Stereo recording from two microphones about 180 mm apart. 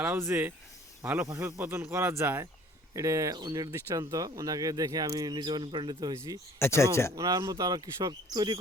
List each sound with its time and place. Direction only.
0.0 s speech: 15° right (ahead or behind)
6.6 s speech: 15° left (ahead or behind)
7.2 s speech: 20° right (ahead or behind)